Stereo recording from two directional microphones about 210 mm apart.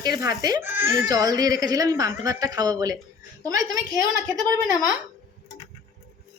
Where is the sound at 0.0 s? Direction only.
20° right (ahead or behind).